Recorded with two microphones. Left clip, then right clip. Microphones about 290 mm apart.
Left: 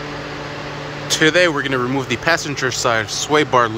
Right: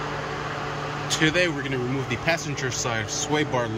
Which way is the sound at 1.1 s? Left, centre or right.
Centre.